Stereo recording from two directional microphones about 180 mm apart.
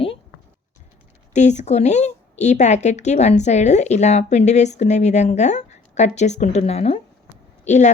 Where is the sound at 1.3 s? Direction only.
40° left (ahead or behind).